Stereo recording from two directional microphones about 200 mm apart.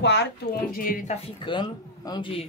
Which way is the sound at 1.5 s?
20° left (ahead or behind).